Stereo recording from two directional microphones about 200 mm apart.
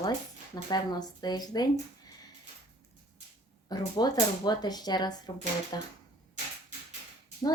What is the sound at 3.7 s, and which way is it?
Speech, 20° left (ahead or behind).